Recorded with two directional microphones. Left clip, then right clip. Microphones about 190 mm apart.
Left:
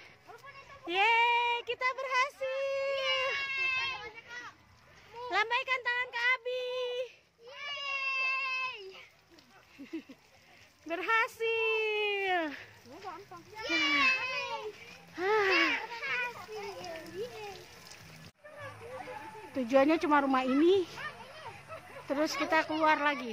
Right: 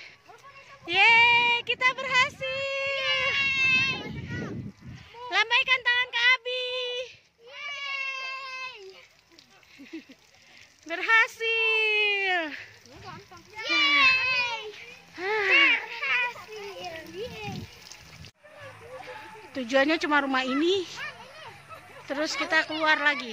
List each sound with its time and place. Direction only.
0.8 s child singing: 5° right (ahead or behind)
3.3 s a sound: 15° right (ahead or behind)
5.3 s child singing: 5° right (ahead or behind)
8.1 s baby cry: 55° right (ahead or behind)
10.9 s speech: centre (ahead or behind)
13.6 s a sound: 25° right (ahead or behind)
15.1 s a sound: 15° left (ahead or behind)
15.9 s children playing: 30° right (ahead or behind)
19.5 s speech: centre (ahead or behind)
22.0 s speech: 10° left (ahead or behind)